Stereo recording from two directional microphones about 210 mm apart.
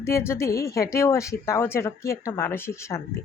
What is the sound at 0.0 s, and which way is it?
Speech, 15° left (ahead or behind).